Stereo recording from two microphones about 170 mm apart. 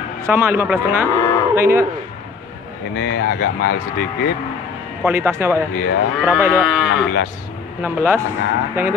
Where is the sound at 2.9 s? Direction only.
75° left (ahead or behind).